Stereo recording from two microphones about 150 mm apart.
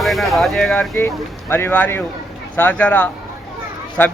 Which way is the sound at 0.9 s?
15° left (ahead or behind).